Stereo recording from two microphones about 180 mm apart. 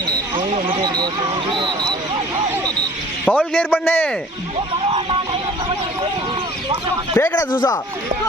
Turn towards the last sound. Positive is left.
turn(degrees=20)  # may be behind; listen again after turning